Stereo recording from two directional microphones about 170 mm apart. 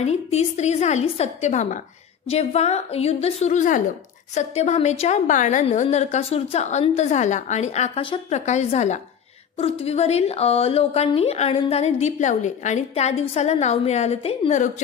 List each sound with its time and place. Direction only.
0.0 s a woman's voice: 40° left (ahead or behind)